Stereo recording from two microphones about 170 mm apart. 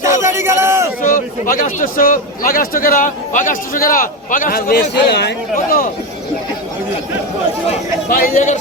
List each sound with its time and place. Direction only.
0.0 s a sound: 15° right (ahead or behind)
1.0 s speech: 55° left (ahead or behind); by 5.3 s 80° left
8.1 s a man's voice: 55° left (ahead or behind)